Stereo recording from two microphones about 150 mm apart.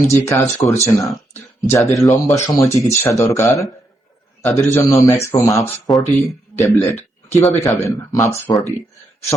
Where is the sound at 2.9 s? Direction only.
20° left (ahead or behind).